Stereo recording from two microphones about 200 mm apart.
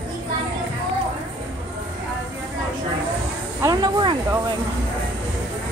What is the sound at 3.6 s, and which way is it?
Speech, 20° right (ahead or behind).